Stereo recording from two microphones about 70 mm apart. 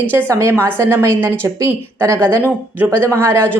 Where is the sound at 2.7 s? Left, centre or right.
Right.